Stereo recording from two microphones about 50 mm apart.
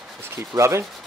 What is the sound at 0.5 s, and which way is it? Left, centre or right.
Rub, right.